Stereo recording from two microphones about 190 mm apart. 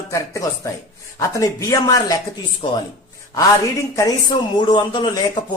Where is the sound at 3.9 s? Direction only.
20° left (ahead or behind).